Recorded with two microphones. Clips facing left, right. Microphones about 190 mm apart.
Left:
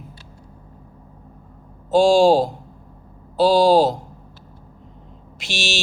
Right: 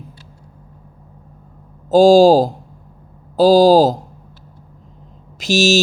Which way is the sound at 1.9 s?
40° right (ahead or behind).